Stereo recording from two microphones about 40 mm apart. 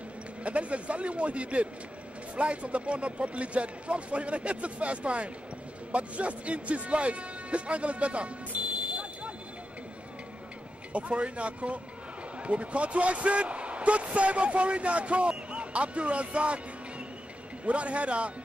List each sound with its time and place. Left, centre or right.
0.4 s speech: right
10.9 s speech: right
17.6 s speech: right